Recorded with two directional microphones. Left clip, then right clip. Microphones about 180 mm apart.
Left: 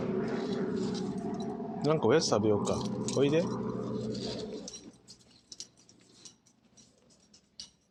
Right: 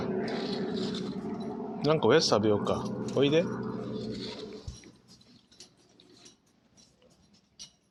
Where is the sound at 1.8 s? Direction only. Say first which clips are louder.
Right 3 dB; 5° right (ahead or behind).